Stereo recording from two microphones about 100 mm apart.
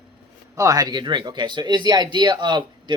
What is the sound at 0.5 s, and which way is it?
Speech, 35° right (ahead or behind).